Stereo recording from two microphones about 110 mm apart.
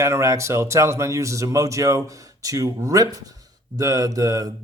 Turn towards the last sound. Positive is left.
turn(degrees=-30)  # may be behind; listen again after turning